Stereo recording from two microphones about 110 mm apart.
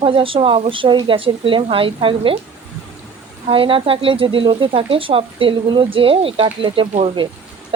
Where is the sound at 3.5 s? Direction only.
55° right (ahead or behind).